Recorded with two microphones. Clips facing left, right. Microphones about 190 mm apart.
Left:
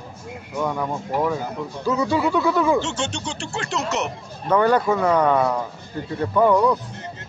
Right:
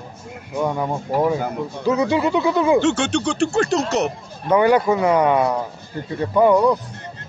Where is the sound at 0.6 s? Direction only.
20° right (ahead or behind).